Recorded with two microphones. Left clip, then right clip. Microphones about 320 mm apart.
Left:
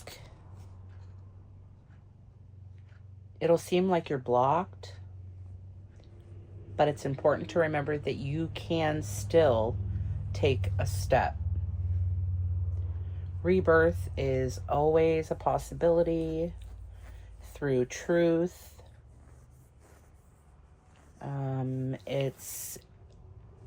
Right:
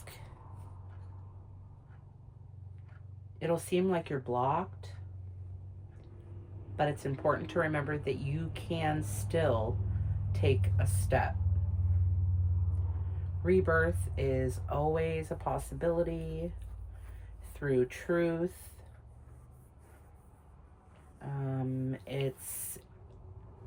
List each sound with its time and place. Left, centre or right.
3.3 s speech: centre
6.7 s speech: centre
13.4 s speech: centre
21.2 s speech: centre